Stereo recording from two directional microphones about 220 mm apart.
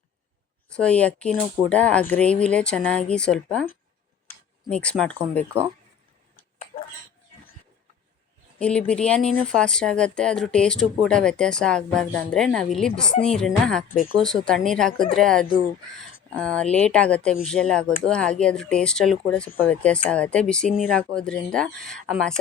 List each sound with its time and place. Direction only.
0.8 s speech: 5° left (ahead or behind)
6.7 s a sound: 30° left (ahead or behind)
8.5 s speech: 5° left (ahead or behind)